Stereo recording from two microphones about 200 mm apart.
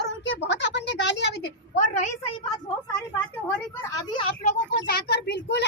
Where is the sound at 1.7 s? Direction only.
40° left (ahead or behind).